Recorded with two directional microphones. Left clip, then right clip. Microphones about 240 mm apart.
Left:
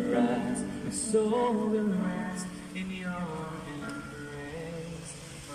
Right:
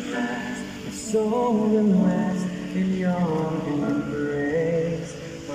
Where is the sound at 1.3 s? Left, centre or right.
Centre; by 4.0 s right.